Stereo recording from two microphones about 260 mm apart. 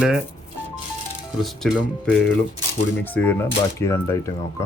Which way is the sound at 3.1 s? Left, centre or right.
Centre.